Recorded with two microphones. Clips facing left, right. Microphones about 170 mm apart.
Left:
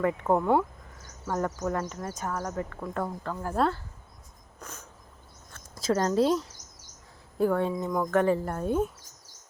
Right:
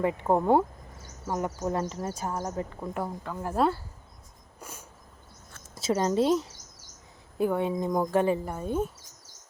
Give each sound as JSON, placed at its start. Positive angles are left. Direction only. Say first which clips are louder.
{"t": 0.0, "sound": "speech", "louder": "even", "side_deg": -20}
{"t": 1.3, "sound": "speech", "louder": "left 1 dB", "side_deg": -15}
{"t": 1.5, "sound": "speech", "louder": "right 1 dB", "side_deg": -30}
{"t": 3.0, "sound": "a woman's voice", "louder": "left 1 dB", "side_deg": -5}
{"t": 4.6, "sound": "a sound", "louder": "even", "side_deg": -10}
{"t": 5.9, "sound": "a woman's voice", "louder": "even", "side_deg": -5}
{"t": 7.3, "sound": "speech", "louder": "left 1 dB", "side_deg": -20}
{"t": 8.4, "sound": "a woman's voice", "louder": "left 2 dB", "side_deg": 0}